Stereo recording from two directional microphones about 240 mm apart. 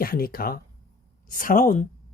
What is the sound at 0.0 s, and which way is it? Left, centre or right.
Speech, left.